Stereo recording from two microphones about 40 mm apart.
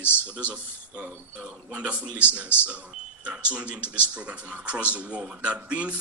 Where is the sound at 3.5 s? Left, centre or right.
Right.